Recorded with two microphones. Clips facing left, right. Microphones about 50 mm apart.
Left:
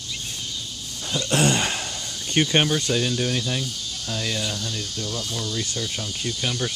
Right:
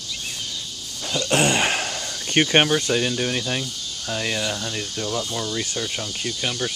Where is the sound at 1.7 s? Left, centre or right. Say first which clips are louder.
Right 4 dB; right.